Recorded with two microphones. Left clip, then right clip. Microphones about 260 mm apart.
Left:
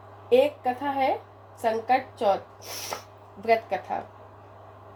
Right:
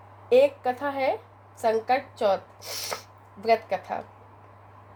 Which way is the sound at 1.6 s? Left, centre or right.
Right.